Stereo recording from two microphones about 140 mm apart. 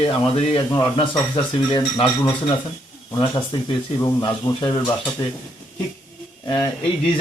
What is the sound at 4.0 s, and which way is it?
Speech, 30° left (ahead or behind).